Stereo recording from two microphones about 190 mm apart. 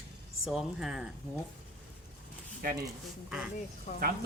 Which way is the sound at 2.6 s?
50° right (ahead or behind).